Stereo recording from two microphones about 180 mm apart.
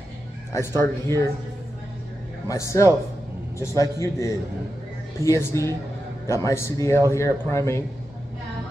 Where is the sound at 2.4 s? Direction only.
15° left (ahead or behind).